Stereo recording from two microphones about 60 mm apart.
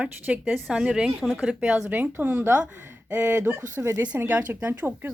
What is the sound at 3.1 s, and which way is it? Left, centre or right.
A woman's voice, right.